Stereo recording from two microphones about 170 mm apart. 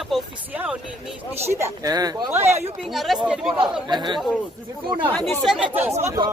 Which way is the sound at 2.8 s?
Centre (ahead or behind).